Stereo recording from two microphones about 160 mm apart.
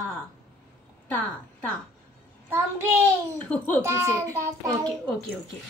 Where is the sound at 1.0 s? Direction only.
10° left (ahead or behind).